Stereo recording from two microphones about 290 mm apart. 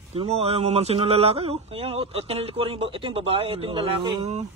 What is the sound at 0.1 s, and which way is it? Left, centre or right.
Speech, right.